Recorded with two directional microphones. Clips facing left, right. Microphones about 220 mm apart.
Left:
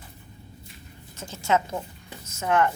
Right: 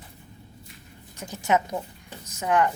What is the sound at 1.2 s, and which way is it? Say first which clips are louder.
A woman's voice: even; 15° right (ahead or behind).